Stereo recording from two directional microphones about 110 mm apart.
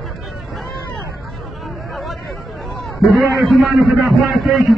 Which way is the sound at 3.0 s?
Centre (ahead or behind).